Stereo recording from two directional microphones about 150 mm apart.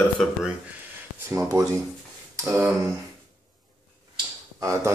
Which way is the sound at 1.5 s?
25° right (ahead or behind).